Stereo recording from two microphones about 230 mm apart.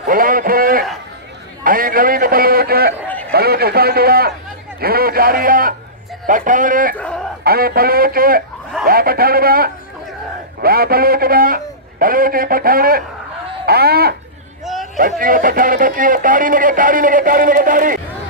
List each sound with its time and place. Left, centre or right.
0.0 s a sound: right
1.6 s a man's voice: right
7.0 s chicken: centre
7.4 s a man's voice: right
14.6 s hubbub: centre
15.0 s speech: right